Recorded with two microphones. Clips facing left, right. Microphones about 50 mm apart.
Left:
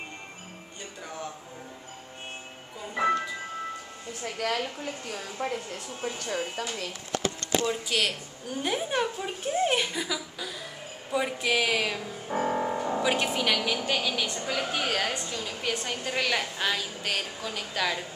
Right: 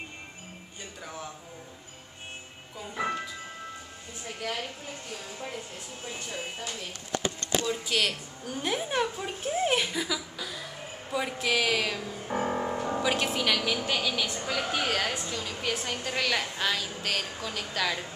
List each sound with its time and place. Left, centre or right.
4.2 s speech: left
5.4 s speech: left
6.0 s speech: left
7.7 s a woman's voice: centre
12.4 s music: centre
13.8 s a woman's voice: centre